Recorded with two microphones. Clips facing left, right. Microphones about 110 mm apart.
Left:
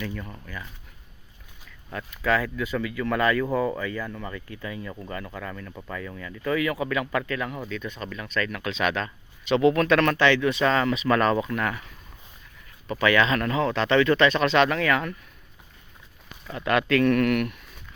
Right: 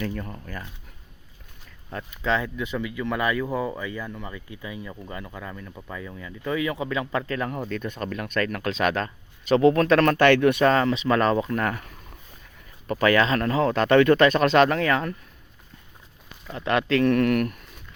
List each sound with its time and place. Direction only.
0.0 s speech: 40° right (ahead or behind)
1.9 s speech: 25° right (ahead or behind); by 10.2 s 40° right (ahead or behind)
10.2 s speech: 55° right (ahead or behind); by 15.1 s 35° right (ahead or behind)
16.6 s speech: 30° right (ahead or behind)